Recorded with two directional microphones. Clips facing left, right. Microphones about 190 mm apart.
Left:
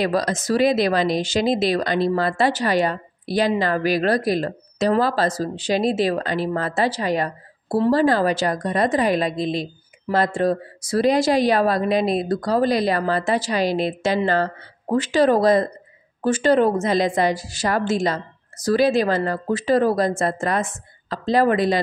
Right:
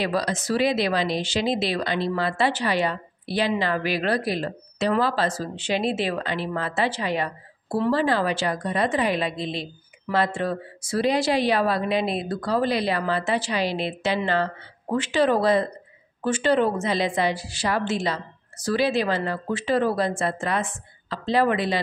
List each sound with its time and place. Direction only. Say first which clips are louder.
0.0 s a woman's voice: left 4 dB; 45° left (ahead or behind)